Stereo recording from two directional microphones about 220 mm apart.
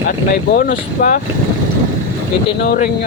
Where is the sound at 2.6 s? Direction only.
45° left (ahead or behind).